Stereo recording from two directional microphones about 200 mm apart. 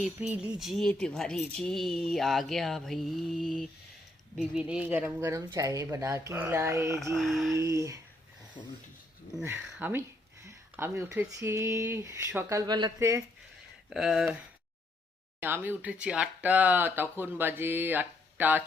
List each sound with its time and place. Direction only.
0.0 s speech: 5° right (ahead or behind)
7.2 s speech: centre (ahead or behind)
7.6 s speech: 15° right (ahead or behind)
8.6 s speech: 35° left (ahead or behind)
9.3 s speech: 10° right (ahead or behind)
13.9 s speech: centre (ahead or behind)
15.4 s speech: 10° right (ahead or behind)